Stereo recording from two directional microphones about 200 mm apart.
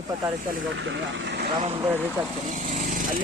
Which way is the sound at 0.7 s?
70° right (ahead or behind).